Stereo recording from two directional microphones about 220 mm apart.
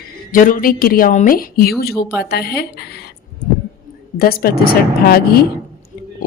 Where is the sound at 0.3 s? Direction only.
40° left (ahead or behind).